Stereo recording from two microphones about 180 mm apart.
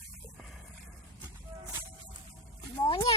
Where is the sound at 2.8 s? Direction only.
20° left (ahead or behind).